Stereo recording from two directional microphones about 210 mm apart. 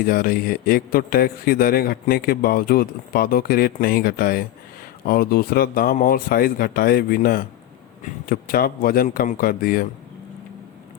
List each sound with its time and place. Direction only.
0.0 s a man's voice: 45° left (ahead or behind)